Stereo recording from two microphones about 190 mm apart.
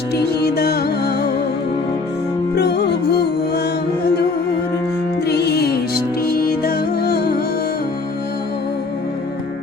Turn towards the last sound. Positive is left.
turn(degrees=55)  # may be behind; listen again after turning